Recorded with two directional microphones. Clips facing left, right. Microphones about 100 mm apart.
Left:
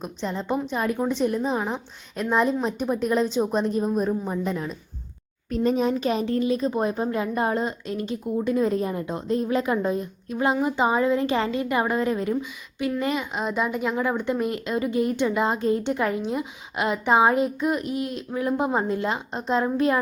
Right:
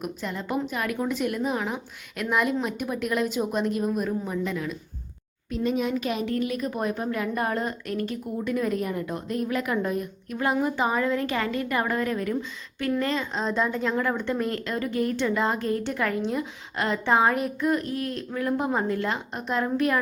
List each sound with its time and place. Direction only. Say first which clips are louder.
0.0 s a woman's voice: left 2 dB; 25° left (ahead or behind)